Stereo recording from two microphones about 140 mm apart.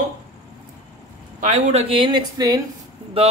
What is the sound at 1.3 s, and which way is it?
Speech, 55° right (ahead or behind).